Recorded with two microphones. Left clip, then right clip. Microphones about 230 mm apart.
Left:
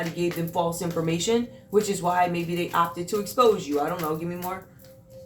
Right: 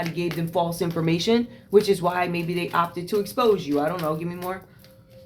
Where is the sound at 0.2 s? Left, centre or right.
Right.